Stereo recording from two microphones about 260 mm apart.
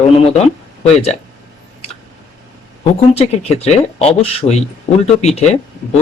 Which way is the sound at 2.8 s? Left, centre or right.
Left.